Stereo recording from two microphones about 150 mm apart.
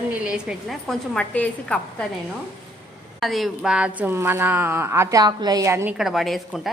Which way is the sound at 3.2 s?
Centre (ahead or behind).